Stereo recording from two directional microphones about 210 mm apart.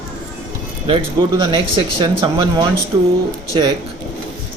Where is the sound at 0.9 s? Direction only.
25° right (ahead or behind).